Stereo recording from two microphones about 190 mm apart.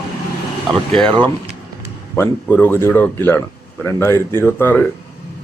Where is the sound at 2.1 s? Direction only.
10° left (ahead or behind).